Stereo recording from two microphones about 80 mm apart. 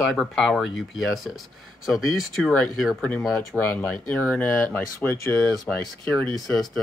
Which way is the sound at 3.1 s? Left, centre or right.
Left.